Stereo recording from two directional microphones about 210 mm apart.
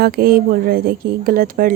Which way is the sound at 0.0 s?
45° right (ahead or behind).